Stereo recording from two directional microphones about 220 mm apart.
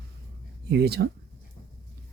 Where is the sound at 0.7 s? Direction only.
45° right (ahead or behind).